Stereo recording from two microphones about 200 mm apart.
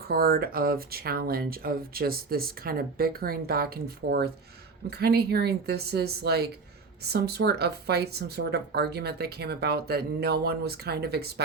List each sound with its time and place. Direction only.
0.1 s speech: 50° right (ahead or behind)